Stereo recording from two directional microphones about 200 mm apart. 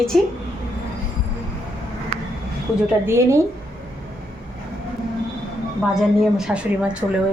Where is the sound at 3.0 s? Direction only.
15° right (ahead or behind).